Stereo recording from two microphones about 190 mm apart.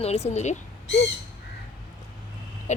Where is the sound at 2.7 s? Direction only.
40° left (ahead or behind).